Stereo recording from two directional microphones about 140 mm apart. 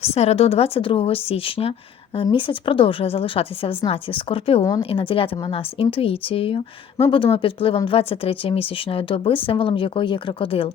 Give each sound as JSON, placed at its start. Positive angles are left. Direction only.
{"t": 0.0, "sound": "a woman's voice", "side_deg": 50}